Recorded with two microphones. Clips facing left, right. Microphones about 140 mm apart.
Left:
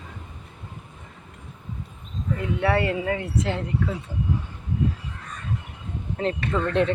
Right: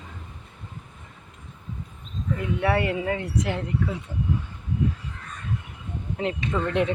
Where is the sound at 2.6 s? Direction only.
20° right (ahead or behind).